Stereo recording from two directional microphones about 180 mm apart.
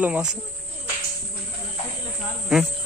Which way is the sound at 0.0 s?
5° right (ahead or behind).